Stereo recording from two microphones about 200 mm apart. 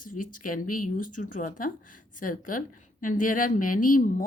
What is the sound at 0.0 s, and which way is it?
Speech, 45° left (ahead or behind).